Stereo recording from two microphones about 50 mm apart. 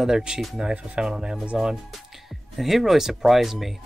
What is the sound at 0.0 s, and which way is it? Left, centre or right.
Speech, centre.